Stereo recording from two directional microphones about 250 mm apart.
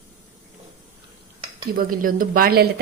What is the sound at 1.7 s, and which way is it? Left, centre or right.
Speech, right.